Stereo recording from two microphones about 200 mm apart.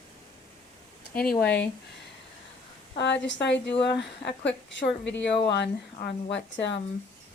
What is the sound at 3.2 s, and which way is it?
A woman's voice, 60° left (ahead or behind).